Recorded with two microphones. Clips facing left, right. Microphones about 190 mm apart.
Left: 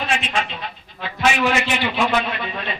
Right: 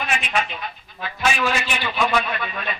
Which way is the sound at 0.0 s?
30° left (ahead or behind).